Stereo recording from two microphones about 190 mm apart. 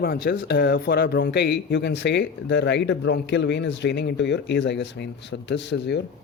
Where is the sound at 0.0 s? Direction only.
55° left (ahead or behind).